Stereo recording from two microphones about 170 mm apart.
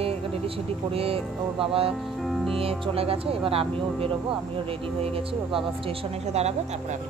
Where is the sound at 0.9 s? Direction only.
35° right (ahead or behind).